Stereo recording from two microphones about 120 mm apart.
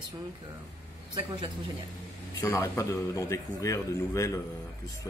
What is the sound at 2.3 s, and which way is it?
Speech, 25° left (ahead or behind).